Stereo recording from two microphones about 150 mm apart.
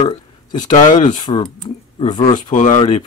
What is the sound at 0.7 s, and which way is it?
Speech, 50° left (ahead or behind).